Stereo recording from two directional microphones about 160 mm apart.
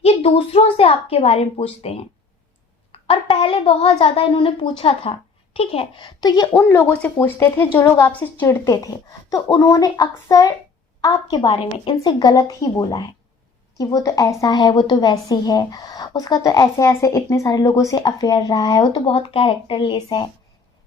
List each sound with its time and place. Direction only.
0.0 s a woman's voice: 40° left (ahead or behind)
3.1 s a woman's voice: 35° left (ahead or behind)